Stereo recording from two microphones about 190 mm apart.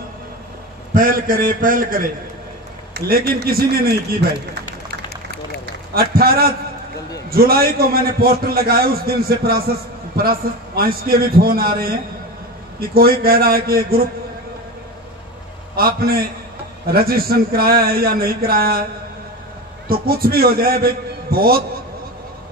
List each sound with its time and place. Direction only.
0.9 s a man's voice: 50° right (ahead or behind)
5.9 s a man's voice: 55° right (ahead or behind)
12.9 s a man's voice: 50° right (ahead or behind)
15.7 s a man's voice: 50° right (ahead or behind)
19.9 s a man's voice: 55° right (ahead or behind)